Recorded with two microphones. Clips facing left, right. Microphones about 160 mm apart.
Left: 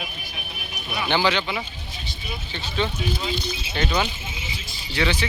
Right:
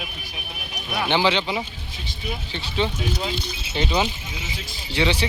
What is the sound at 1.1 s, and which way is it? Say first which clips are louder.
Speech: right 1 dB; 25° right (ahead or behind).